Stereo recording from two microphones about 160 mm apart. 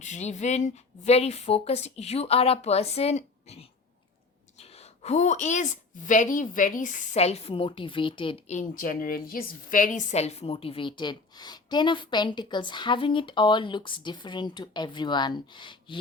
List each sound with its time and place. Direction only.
0.0 s a woman's voice: 50° left (ahead or behind)
8.5 s a woman's voice: 60° left (ahead or behind); by 16.0 s 30° left (ahead or behind)